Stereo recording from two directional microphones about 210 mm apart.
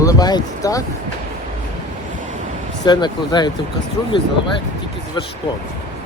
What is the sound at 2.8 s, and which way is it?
Speech, 20° left (ahead or behind).